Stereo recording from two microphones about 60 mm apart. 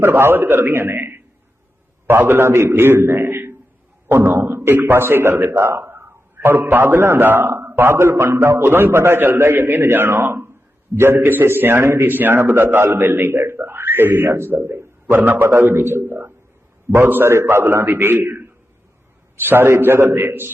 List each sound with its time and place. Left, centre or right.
0.0 s a man's voice: right
2.5 s a man's voice: right
11.2 s a man's voice: right